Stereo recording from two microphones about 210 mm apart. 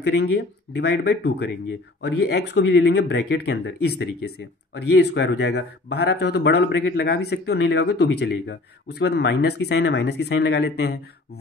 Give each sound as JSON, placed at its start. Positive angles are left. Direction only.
{"t": 0.0, "sound": "speech", "side_deg": 55}